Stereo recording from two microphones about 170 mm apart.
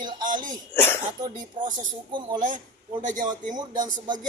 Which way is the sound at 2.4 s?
50° right (ahead or behind).